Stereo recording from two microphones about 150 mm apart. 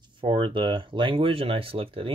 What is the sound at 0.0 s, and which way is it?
Speech, 35° right (ahead or behind).